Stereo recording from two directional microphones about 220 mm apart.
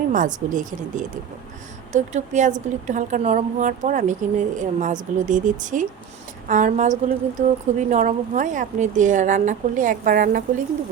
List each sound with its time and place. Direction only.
0.1 s a woman's voice: 35° right (ahead or behind)